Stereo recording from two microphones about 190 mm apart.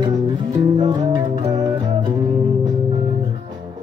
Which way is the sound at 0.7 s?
20° right (ahead or behind).